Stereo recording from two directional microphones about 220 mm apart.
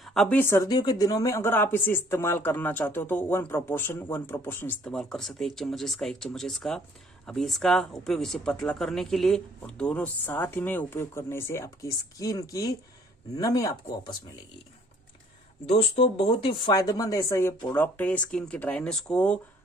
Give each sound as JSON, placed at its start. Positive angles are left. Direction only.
{"t": 0.0, "sound": "speech", "side_deg": 0}
{"t": 15.7, "sound": "speech", "side_deg": 25}